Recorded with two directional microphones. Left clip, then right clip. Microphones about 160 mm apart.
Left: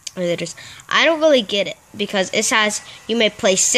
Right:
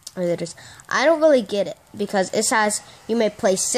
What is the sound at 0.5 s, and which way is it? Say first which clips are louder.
Speech: left 5 dB; 25° left (ahead or behind).